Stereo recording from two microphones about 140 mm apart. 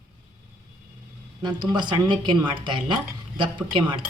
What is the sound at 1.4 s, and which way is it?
Speech, 30° right (ahead or behind).